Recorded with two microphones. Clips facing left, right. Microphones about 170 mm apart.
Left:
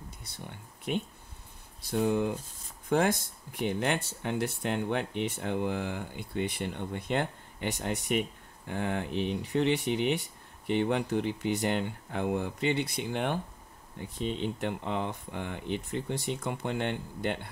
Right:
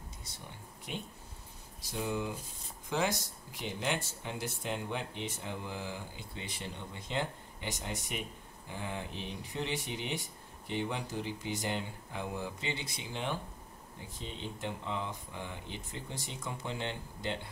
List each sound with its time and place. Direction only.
0.9 s speech: 60° left (ahead or behind)